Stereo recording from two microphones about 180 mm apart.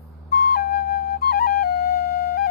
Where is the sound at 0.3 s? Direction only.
60° left (ahead or behind).